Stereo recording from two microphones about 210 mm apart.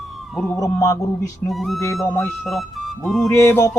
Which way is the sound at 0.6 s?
15° left (ahead or behind).